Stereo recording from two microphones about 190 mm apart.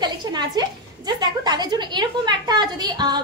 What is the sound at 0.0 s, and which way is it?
A woman's voice, 20° right (ahead or behind).